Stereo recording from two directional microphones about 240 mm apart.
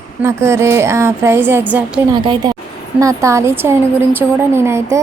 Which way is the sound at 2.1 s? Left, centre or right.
Centre.